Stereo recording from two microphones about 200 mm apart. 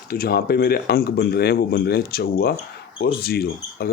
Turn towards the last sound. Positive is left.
turn(degrees=50)  # may be behind; listen again after turning